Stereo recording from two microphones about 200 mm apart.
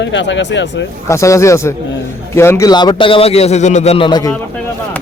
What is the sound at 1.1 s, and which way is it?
A man's voice, 15° left (ahead or behind).